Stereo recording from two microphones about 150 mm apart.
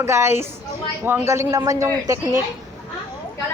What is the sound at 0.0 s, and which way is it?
Speech, 15° right (ahead or behind).